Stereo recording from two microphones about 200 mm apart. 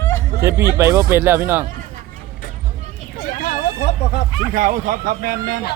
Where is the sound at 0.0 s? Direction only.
15° left (ahead or behind).